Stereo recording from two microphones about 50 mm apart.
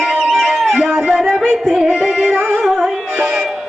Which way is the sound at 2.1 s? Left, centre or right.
Right.